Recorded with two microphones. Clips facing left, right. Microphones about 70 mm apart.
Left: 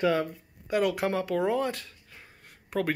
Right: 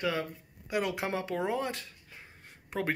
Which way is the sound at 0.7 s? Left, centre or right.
Centre.